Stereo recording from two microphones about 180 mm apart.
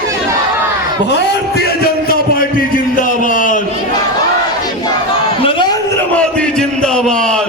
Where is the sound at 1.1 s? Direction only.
65° left (ahead or behind); by 3.6 s 45° left (ahead or behind).